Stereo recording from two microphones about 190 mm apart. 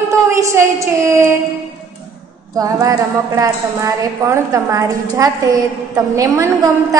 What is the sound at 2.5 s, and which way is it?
A woman's voice, 20° right (ahead or behind).